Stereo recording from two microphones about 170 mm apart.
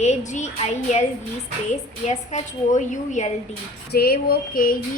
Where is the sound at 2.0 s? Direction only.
45° left (ahead or behind).